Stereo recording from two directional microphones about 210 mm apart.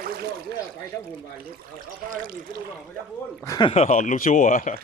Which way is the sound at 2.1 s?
40° right (ahead or behind).